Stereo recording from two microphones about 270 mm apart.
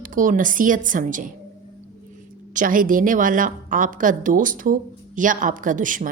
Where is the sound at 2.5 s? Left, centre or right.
Right.